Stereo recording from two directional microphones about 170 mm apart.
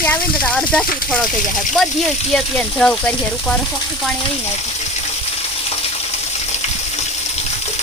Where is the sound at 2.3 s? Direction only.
5° left (ahead or behind).